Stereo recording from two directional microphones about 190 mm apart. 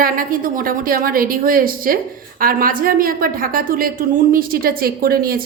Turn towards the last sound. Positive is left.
turn(degrees=-50)  # may be behind; listen again after turning